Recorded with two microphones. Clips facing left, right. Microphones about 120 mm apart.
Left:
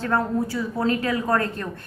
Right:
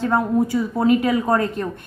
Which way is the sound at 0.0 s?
15° right (ahead or behind).